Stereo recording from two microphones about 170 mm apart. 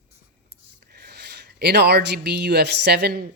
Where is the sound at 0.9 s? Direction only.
70° right (ahead or behind).